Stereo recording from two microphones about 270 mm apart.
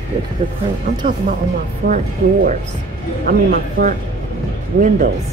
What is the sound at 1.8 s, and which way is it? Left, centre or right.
Speech, right.